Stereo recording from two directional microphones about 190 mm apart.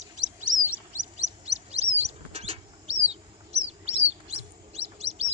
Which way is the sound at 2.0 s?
30° right (ahead or behind).